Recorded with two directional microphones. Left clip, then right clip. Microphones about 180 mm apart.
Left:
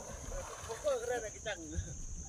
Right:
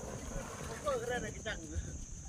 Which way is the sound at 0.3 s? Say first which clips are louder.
Left 4 dB; centre (ahead or behind).